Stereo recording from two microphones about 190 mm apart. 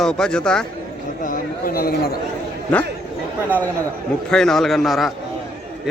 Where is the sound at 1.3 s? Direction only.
50° left (ahead or behind).